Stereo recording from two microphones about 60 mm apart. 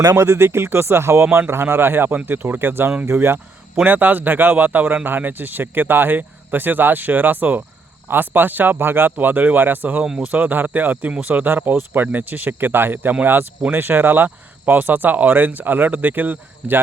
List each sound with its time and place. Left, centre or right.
0.0 s speech: right
0.3 s speech: right
3.8 s speech: right
10.0 s speech: centre
10.3 s speech: right